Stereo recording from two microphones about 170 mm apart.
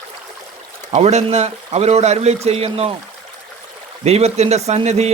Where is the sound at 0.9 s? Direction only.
40° right (ahead or behind).